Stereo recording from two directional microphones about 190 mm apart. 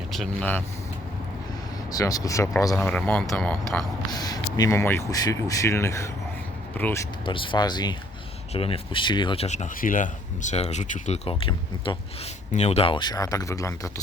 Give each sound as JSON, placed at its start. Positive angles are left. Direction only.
{"t": 0.1, "sound": "speech", "side_deg": 5}
{"t": 1.9, "sound": "speech", "side_deg": 20}
{"t": 4.1, "sound": "speech", "side_deg": 20}
{"t": 7.3, "sound": "speech", "side_deg": 25}